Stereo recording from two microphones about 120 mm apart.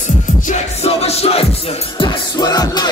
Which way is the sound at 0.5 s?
60° left (ahead or behind).